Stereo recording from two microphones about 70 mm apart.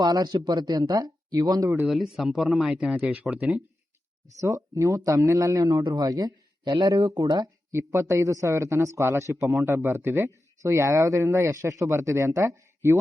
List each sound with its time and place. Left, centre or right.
0.0 s speech: right
1.9 s speech: centre
4.4 s a man's voice: right
7.9 s speech: right